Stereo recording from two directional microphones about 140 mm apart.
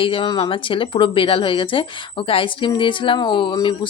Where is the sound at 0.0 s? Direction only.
40° left (ahead or behind).